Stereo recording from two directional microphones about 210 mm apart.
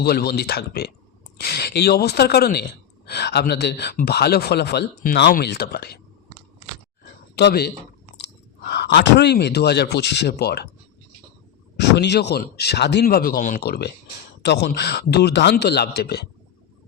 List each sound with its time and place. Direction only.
0.0 s speech: 50° left (ahead or behind)
7.0 s a sound: 50° left (ahead or behind)
8.1 s speech: 55° left (ahead or behind)
11.8 s speech: 55° left (ahead or behind)